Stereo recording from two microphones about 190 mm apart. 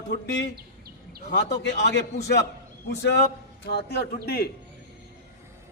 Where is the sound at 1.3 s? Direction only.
65° left (ahead or behind).